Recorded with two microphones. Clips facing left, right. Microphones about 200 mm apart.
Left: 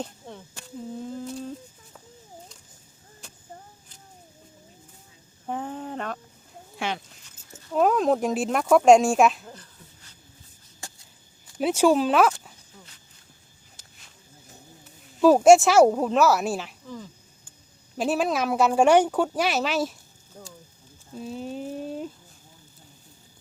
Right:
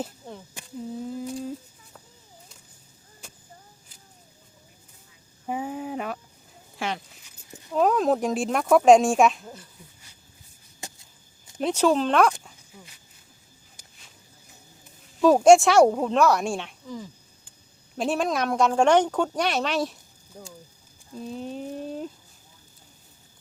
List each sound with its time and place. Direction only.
0.0 s speech: 5° right (ahead or behind)
1.0 s humming: 5° right (ahead or behind)
5.5 s a sound: 10° right (ahead or behind)
6.7 s speech: centre (ahead or behind)
10.8 s a sound: 20° right (ahead or behind)
11.6 s speech: 10° left (ahead or behind)
12.7 s speech: 10° right (ahead or behind)
15.2 s speech: 5° left (ahead or behind)
17.9 s speech: centre (ahead or behind)
20.3 s speech: 15° right (ahead or behind)
21.2 s speech: centre (ahead or behind)